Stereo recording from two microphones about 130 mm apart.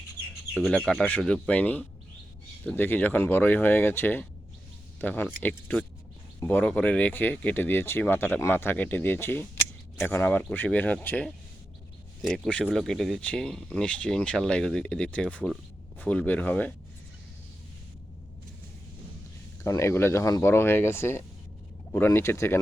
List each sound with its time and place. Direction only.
0.7 s speech: 5° left (ahead or behind)
12.2 s speech: centre (ahead or behind)
19.6 s speech: 20° left (ahead or behind)